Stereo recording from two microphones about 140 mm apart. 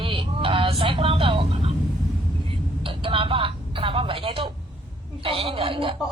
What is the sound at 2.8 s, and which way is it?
Speech, 40° right (ahead or behind).